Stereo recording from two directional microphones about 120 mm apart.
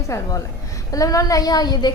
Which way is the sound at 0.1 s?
30° left (ahead or behind).